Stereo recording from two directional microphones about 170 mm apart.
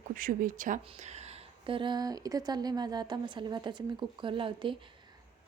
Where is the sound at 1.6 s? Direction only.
30° right (ahead or behind).